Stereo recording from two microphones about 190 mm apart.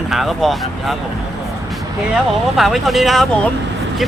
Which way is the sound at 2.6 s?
Centre (ahead or behind).